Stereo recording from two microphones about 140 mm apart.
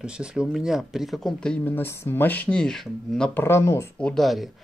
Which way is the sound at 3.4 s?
20° left (ahead or behind).